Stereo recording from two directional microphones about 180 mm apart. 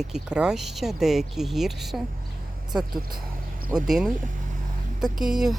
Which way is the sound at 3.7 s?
Centre (ahead or behind).